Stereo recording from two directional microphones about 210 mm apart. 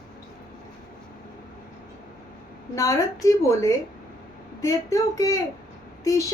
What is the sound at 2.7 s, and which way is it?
A woman's voice, 15° left (ahead or behind).